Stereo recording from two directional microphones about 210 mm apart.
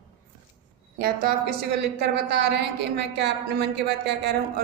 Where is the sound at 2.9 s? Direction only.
50° right (ahead or behind).